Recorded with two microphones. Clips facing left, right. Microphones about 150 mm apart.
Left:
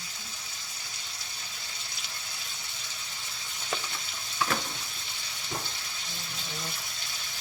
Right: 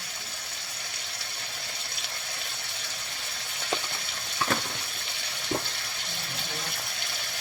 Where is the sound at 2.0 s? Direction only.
65° right (ahead or behind).